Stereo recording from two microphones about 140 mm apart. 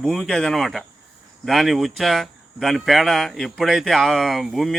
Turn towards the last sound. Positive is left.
turn(degrees=0)  # may be behind; listen again after turning